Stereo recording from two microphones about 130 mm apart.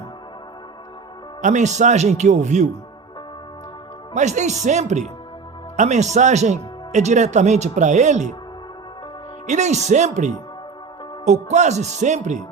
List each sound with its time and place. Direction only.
1.4 s speech: 70° right (ahead or behind)
4.1 s speech: 65° right (ahead or behind)
9.5 s speech: 65° right (ahead or behind)